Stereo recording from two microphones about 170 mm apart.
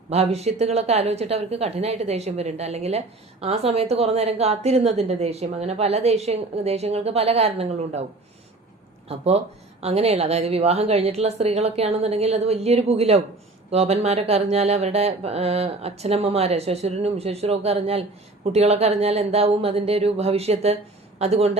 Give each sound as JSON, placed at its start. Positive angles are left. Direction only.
{"t": 0.1, "sound": "a woman's voice", "side_deg": -40}
{"t": 9.0, "sound": "a woman's voice", "side_deg": -40}